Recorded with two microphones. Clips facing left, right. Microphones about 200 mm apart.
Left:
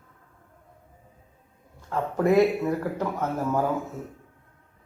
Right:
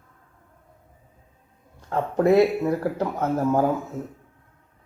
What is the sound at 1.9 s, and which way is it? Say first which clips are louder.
Speech: right 3 dB; 30° right (ahead or behind).